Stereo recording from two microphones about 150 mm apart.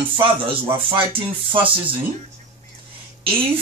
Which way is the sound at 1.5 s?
35° right (ahead or behind).